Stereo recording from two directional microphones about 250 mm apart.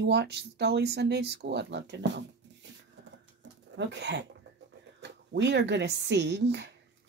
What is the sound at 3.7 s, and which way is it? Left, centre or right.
Speech, right.